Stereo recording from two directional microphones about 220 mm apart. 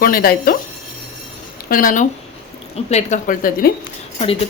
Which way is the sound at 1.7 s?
40° left (ahead or behind).